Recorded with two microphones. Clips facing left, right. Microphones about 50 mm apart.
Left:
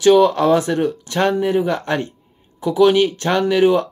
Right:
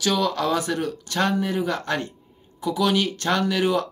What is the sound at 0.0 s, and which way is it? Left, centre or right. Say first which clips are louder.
Speech: left 10 dB; left.